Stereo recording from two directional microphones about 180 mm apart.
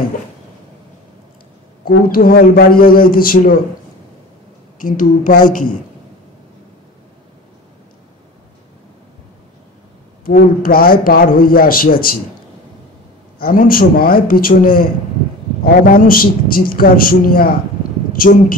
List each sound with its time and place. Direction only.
1.9 s a man's voice: 55° left (ahead or behind)
4.8 s a man's voice: 50° left (ahead or behind)
10.2 s a man's voice: 55° left (ahead or behind)
13.4 s a man's voice: 55° left (ahead or behind)